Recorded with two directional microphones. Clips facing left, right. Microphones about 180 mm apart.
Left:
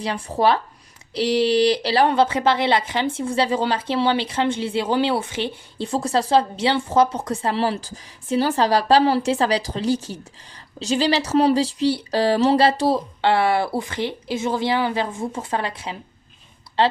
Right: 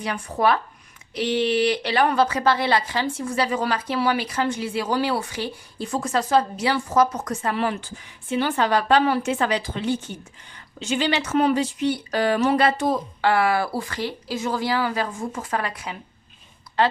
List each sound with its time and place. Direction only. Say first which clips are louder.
0.0 s speech: left 2 dB; 30° left (ahead or behind)